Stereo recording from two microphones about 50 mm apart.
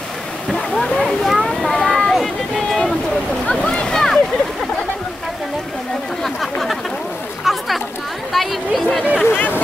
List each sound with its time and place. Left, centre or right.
0.5 s speech: centre
1.0 s a sound: centre
3.4 s a sound: centre
6.2 s speech: centre
7.4 s chatter: centre
8.3 s speech: centre
9.2 s speech: left